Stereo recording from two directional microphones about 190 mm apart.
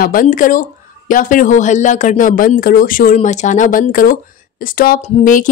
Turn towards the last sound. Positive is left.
turn(degrees=45)  # may be behind; listen again after turning